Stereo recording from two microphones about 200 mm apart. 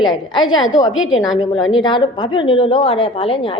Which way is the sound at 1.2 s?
20° left (ahead or behind).